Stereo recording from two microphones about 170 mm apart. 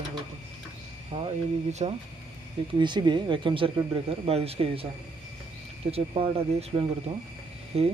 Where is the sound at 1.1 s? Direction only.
35° right (ahead or behind).